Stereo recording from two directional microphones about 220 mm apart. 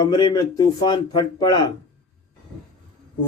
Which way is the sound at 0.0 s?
20° left (ahead or behind).